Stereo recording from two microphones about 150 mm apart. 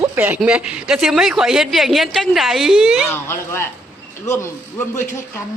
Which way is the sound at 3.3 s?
15° left (ahead or behind).